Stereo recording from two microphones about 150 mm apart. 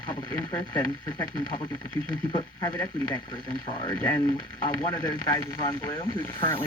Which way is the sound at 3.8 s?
25° left (ahead or behind).